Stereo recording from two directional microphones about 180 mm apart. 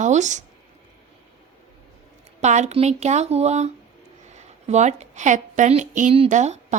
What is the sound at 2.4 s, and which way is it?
A woman's voice, 40° right (ahead or behind).